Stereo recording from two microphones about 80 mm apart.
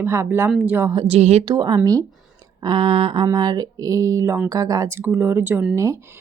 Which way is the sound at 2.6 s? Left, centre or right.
Right.